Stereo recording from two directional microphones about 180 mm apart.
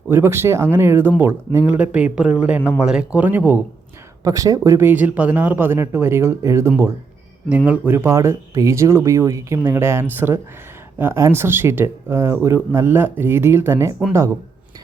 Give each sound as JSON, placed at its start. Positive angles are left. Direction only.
{"t": 0.1, "sound": "speech", "side_deg": -15}